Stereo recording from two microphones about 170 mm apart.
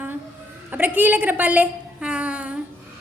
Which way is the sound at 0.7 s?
10° right (ahead or behind).